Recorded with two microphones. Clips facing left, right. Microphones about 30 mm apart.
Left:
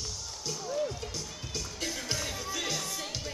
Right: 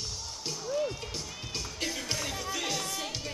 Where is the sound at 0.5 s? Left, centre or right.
Centre.